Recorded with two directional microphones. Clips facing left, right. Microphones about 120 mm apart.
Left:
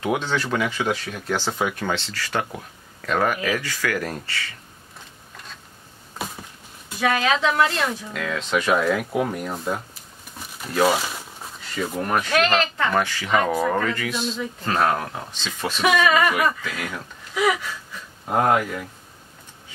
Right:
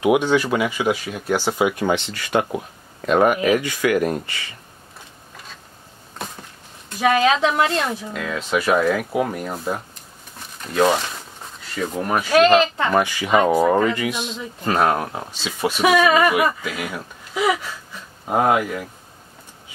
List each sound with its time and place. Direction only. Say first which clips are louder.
0.0 s speech: right 7 dB; 15° right (ahead or behind)
6.2 s a sound: left 1 dB; 5° left (ahead or behind)
7.0 s speech: right 4 dB; 25° right (ahead or behind)
8.1 s speech: right 1 dB; 5° right (ahead or behind)